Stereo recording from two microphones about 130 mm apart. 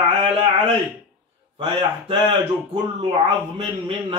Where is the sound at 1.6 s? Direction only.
45° right (ahead or behind).